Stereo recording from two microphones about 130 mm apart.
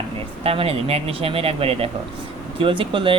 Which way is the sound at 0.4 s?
50° right (ahead or behind).